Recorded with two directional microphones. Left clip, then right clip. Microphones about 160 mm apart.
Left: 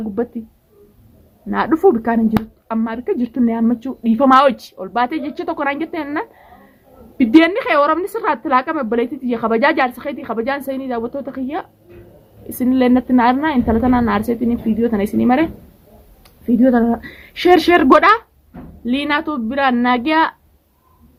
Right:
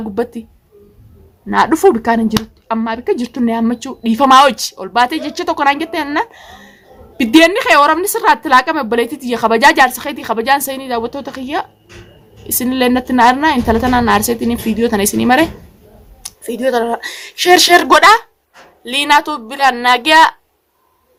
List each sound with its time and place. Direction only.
0.1 s a woman's voice: 20° right (ahead or behind)
1.5 s a woman's voice: 15° right (ahead or behind)